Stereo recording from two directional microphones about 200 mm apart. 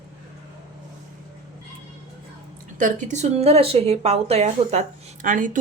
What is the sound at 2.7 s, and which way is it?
A woman's voice, 40° right (ahead or behind).